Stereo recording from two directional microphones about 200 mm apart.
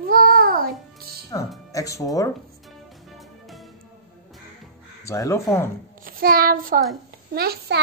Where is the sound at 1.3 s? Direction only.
20° left (ahead or behind).